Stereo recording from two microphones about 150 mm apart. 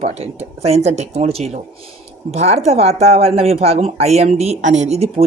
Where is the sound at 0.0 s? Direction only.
45° right (ahead or behind).